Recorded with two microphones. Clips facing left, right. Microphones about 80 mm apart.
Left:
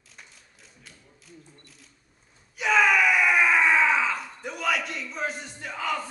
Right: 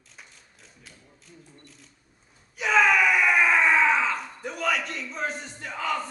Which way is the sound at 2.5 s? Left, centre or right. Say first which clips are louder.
Even; centre.